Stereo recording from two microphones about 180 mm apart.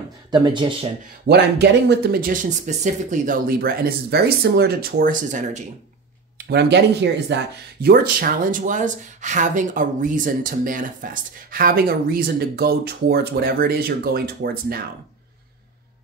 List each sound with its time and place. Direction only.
0.3 s speech: 25° right (ahead or behind)
1.2 s speech: 65° right (ahead or behind); by 5.6 s 45° right (ahead or behind)
6.3 s speech: 65° right (ahead or behind)
7.8 s speech: 55° right (ahead or behind)